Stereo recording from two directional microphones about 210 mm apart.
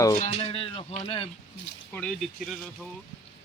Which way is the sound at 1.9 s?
5° left (ahead or behind).